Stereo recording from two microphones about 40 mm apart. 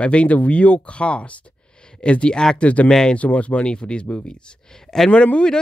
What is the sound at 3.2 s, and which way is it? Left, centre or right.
Speech, left.